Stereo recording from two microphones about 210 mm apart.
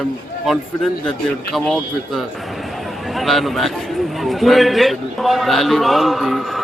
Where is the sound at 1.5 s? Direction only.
Centre (ahead or behind).